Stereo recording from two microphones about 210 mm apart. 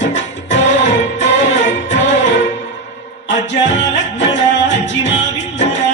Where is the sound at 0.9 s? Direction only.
60° left (ahead or behind).